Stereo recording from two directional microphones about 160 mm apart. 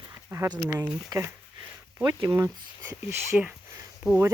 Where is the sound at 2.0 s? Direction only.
20° right (ahead or behind).